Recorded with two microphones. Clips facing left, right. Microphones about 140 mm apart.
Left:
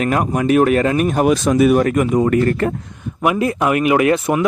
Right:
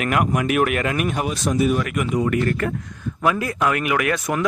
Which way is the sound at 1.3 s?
85° left.